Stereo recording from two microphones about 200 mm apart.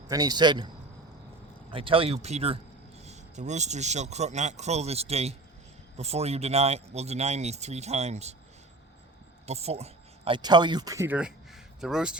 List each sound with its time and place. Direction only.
0.1 s speech: 20° right (ahead or behind)
1.7 s speech: 25° right (ahead or behind)
9.5 s speech: 30° right (ahead or behind); by 12.1 s 5° right (ahead or behind)